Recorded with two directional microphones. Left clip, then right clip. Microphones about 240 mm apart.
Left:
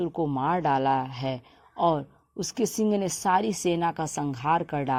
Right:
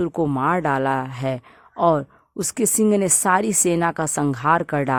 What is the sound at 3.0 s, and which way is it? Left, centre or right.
A woman's voice, right.